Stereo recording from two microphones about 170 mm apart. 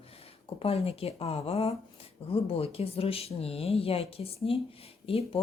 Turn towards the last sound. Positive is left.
turn(degrees=35)  # may be behind; listen again after turning